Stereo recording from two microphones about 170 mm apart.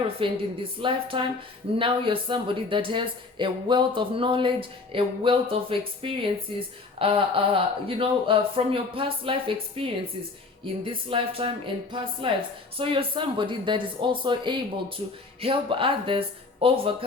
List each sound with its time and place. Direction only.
0.2 s speech: 30° right (ahead or behind)